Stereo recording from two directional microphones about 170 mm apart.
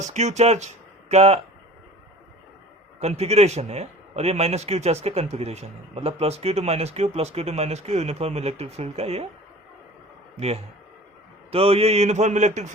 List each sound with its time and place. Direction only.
0.0 s speech: 40° right (ahead or behind)
3.0 s speech: 40° right (ahead or behind)
11.5 s speech: 35° right (ahead or behind)